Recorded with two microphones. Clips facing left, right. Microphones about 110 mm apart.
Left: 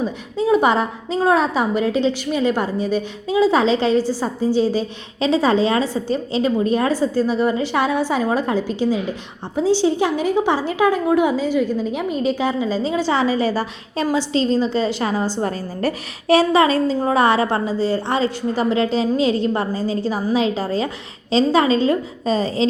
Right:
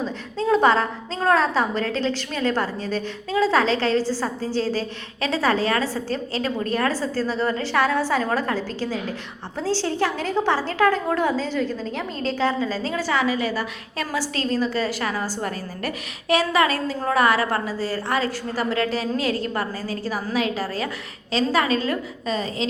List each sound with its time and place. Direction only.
0.0 s a woman's voice: 15° left (ahead or behind); by 22.6 s 30° left (ahead or behind)